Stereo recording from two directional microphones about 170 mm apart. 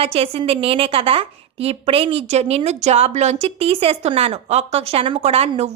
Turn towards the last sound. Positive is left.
turn(degrees=-40)  # may be behind; listen again after turning